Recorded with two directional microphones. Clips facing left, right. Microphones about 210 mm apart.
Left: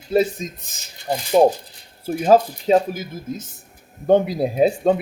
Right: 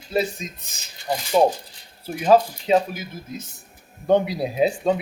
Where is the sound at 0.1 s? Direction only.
45° left (ahead or behind).